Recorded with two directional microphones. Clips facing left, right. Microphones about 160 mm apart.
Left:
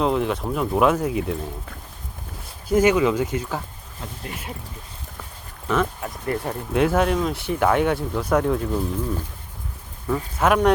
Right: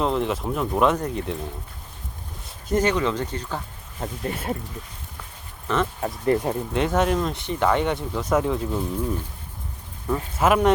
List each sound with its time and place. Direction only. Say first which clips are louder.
0.0 s speech: left 2 dB; centre (ahead or behind)
2.6 s speech: left 4 dB; 5° left (ahead or behind)
4.0 s speech: right 6 dB; 40° right (ahead or behind)
5.6 s speech: left 2 dB; centre (ahead or behind)
6.3 s speech: right 3 dB; 20° right (ahead or behind)
6.7 s speech: left 3 dB; centre (ahead or behind)
10.1 s speech: even; 5° right (ahead or behind)